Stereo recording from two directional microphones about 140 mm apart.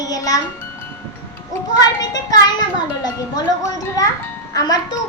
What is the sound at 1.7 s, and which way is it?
Speech, 25° left (ahead or behind).